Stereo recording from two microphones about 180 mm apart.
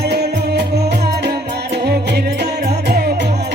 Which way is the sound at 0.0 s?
65° right (ahead or behind).